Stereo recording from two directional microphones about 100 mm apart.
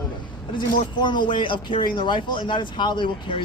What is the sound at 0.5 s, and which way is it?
Speech, 50° left (ahead or behind).